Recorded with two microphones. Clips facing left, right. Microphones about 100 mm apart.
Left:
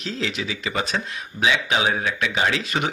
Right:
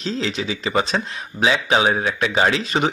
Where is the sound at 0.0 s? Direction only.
30° right (ahead or behind).